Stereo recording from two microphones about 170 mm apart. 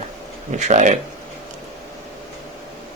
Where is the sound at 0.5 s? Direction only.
45° right (ahead or behind).